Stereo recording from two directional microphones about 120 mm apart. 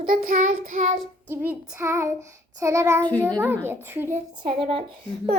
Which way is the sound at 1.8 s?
25° right (ahead or behind).